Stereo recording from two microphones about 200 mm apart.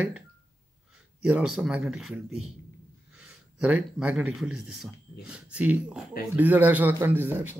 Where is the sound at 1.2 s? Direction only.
5° right (ahead or behind).